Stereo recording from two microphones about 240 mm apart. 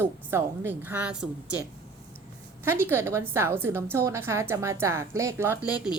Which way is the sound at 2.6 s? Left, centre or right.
Centre.